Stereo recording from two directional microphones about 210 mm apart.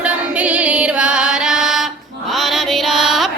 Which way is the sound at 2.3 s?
Centre (ahead or behind).